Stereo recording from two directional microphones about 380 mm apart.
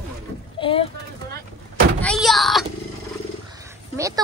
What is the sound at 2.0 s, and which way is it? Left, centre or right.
Speech, centre.